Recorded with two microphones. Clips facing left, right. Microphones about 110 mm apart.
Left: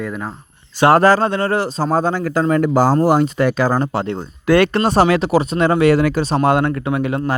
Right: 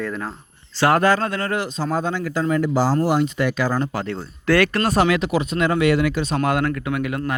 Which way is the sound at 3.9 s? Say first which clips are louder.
Left 5 dB; 20° left (ahead or behind).